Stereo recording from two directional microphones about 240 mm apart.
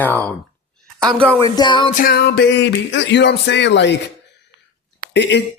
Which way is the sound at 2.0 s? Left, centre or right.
Left.